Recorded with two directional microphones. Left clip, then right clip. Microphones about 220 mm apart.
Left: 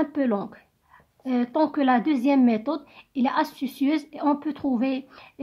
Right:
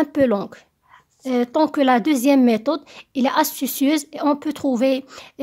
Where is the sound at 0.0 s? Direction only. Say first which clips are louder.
Right 7 dB; 40° right (ahead or behind).